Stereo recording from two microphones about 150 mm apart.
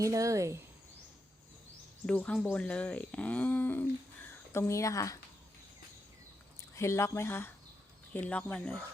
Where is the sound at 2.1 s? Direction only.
5° left (ahead or behind); by 5.2 s 20° left (ahead or behind).